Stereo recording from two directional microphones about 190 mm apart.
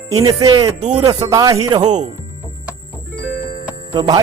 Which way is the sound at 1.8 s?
40° right (ahead or behind).